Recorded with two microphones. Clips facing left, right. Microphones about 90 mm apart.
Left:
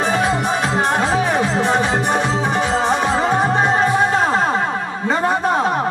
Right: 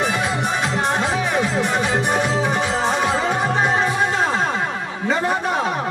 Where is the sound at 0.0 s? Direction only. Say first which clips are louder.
Left 3 dB; 35° left (ahead or behind).